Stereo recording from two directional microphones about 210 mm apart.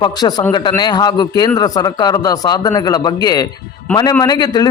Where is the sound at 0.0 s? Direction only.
20° left (ahead or behind).